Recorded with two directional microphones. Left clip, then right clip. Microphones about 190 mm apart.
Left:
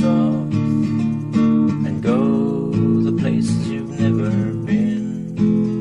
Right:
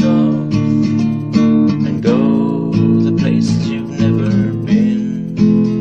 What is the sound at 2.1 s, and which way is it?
Music, 30° right (ahead or behind).